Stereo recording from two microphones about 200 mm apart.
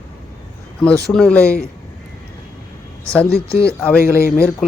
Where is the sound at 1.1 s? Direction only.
5° left (ahead or behind).